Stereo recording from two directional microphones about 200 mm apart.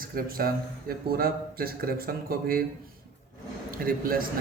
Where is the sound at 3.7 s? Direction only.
45° right (ahead or behind).